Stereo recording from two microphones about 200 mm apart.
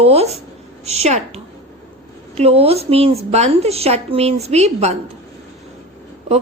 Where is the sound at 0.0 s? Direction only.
30° right (ahead or behind).